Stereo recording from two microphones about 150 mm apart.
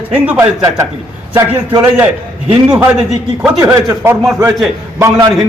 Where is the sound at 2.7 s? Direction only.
10° right (ahead or behind).